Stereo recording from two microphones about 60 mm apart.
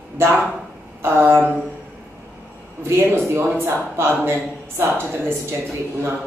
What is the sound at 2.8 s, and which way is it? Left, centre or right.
A man's voice, right.